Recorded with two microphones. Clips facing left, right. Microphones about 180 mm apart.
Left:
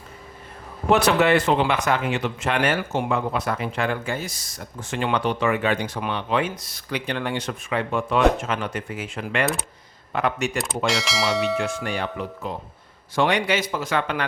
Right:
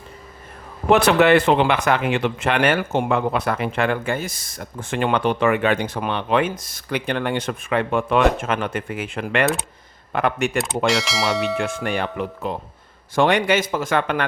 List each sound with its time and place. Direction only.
0.9 s speech: 60° right (ahead or behind)
10.8 s speech: centre (ahead or behind)
11.6 s a man's voice: 55° right (ahead or behind)